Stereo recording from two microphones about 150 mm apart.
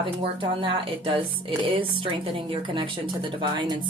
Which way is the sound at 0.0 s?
35° right (ahead or behind).